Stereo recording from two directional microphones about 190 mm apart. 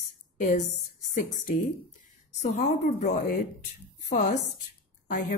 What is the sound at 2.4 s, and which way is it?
Speech, 35° left (ahead or behind).